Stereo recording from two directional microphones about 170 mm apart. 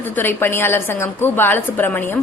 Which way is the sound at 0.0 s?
10° left (ahead or behind).